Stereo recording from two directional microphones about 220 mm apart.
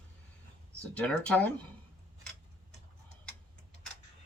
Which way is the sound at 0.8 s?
5° left (ahead or behind).